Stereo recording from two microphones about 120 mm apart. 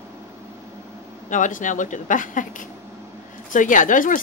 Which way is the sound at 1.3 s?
90° left.